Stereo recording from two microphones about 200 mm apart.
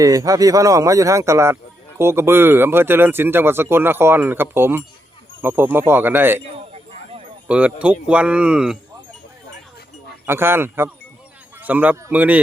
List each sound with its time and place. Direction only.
0.0 s speech: 15° right (ahead or behind)
7.4 s speech: 5° right (ahead or behind)
10.2 s speech: 10° right (ahead or behind)